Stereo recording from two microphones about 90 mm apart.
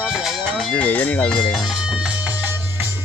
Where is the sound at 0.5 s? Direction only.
15° left (ahead or behind).